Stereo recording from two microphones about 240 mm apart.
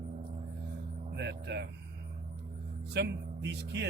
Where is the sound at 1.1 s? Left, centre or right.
Right.